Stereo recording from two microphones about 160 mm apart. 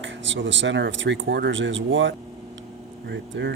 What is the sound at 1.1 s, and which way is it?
Speech, 90° right.